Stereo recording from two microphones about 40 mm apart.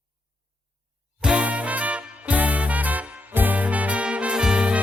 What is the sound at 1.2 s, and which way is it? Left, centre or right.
Music, right.